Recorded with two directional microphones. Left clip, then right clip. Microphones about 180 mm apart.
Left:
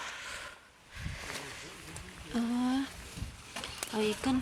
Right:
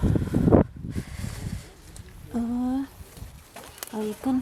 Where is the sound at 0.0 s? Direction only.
55° right (ahead or behind).